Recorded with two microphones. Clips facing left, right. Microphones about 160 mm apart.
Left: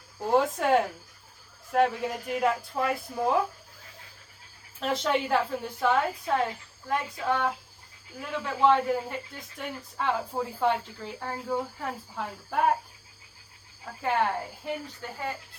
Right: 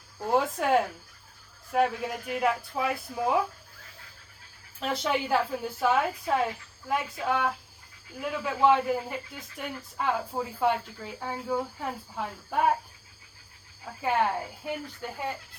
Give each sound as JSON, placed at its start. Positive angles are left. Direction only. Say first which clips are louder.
{"t": 0.3, "sound": "speech", "louder": "left 2 dB", "side_deg": 0}
{"t": 4.8, "sound": "speech", "louder": "left 2 dB", "side_deg": 0}
{"t": 13.8, "sound": "speech", "louder": "even", "side_deg": -5}